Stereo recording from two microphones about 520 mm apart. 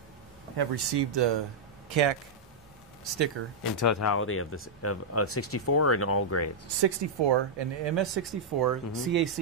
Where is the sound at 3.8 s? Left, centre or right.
Left.